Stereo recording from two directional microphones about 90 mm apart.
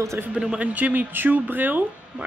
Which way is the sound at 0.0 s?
30° right (ahead or behind).